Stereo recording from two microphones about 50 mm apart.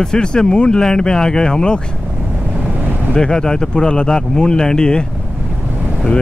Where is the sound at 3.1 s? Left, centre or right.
Centre.